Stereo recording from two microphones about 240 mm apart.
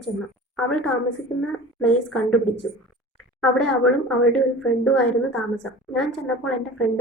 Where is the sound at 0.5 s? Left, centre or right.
Centre.